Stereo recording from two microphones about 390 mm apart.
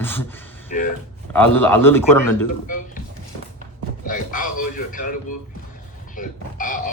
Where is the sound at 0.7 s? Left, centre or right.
Left.